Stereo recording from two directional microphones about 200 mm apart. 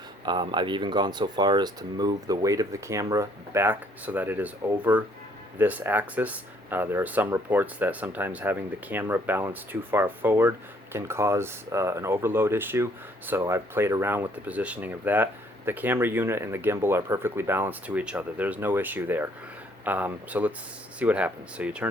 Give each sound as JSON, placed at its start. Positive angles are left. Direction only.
{"t": 0.3, "sound": "speech", "side_deg": -25}